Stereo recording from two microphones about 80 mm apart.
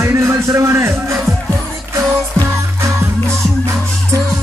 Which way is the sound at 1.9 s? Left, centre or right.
Right.